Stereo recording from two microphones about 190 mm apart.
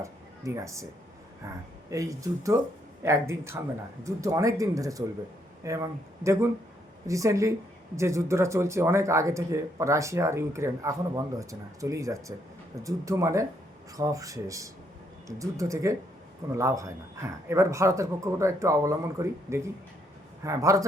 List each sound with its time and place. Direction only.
0.0 s speech: 15° right (ahead or behind)